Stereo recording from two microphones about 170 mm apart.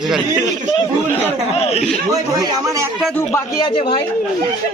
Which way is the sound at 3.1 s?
20° left (ahead or behind).